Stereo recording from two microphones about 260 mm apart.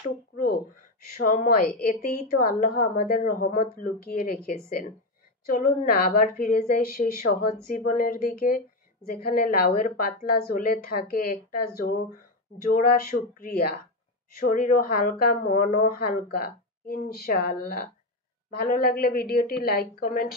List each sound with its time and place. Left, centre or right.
1.2 s speech: left